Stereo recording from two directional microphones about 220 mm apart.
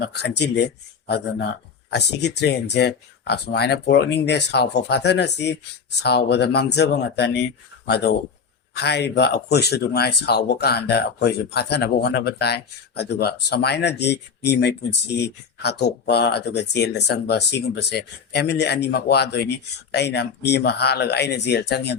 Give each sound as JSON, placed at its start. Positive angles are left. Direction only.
{"t": 0.1, "sound": "speech", "side_deg": 50}